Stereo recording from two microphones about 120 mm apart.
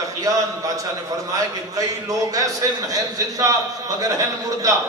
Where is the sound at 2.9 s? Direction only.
30° right (ahead or behind).